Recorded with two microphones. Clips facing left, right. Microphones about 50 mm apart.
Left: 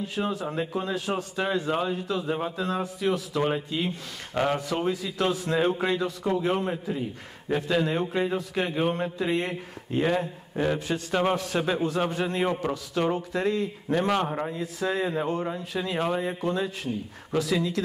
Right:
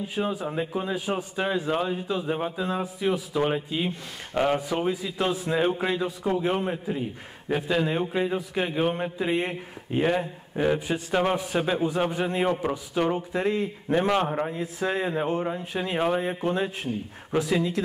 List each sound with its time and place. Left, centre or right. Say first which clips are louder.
0.0 s a man's voice: right 1 dB; centre
1.7 s speech: right 1 dB; centre
2.0 s a man's voice: right 1 dB; centre
14.5 s speech: right 1 dB; right